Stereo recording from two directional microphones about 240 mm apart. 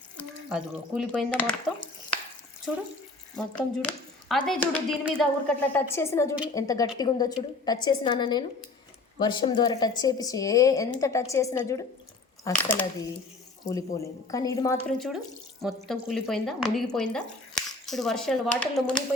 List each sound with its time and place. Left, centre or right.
0.2 s speech: centre
3.3 s a woman's voice: centre
14.9 s speech: centre